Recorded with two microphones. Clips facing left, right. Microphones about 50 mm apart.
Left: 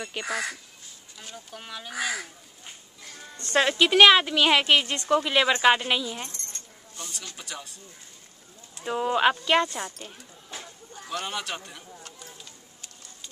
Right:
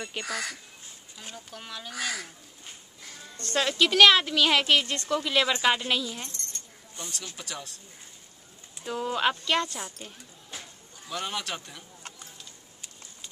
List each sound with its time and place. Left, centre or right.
0.2 s a woman's voice: centre; by 6.6 s left
7.3 s a man's voice: centre
8.8 s a woman's voice: left
9.8 s speech: left
11.1 s a man's voice: centre